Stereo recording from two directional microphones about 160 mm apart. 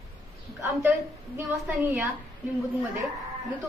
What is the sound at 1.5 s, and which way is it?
Speech, 10° right (ahead or behind).